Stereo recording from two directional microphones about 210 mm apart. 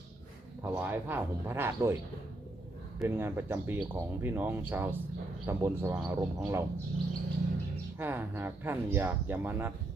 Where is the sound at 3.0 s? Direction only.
10° right (ahead or behind).